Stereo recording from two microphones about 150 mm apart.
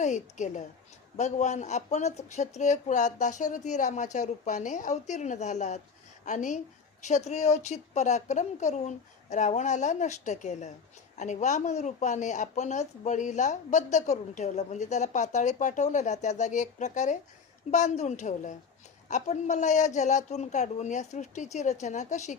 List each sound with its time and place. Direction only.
0.0 s a woman's voice: 55° left (ahead or behind)